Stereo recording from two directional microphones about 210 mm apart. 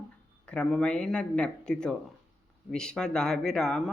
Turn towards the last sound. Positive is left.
turn(degrees=0)  # may be behind; listen again after turning